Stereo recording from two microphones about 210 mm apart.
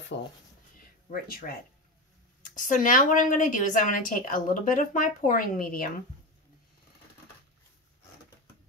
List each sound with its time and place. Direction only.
0.1 s a woman's voice: 55° left (ahead or behind)